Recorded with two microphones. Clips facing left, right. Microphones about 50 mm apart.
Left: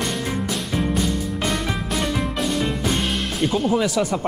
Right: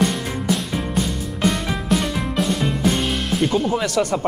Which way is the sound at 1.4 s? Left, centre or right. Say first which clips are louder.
Right 6 dB; centre.